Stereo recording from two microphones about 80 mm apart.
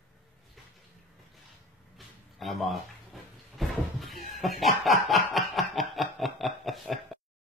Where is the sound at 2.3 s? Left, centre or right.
Centre.